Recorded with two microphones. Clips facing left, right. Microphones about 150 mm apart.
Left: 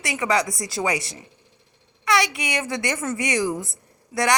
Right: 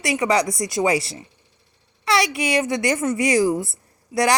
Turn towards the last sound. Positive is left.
turn(degrees=-25)  # may be behind; listen again after turning